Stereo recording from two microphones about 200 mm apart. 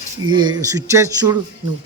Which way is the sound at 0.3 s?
20° right (ahead or behind).